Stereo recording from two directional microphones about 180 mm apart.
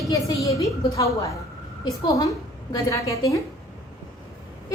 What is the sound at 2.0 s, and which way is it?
A woman's voice, 20° left (ahead or behind).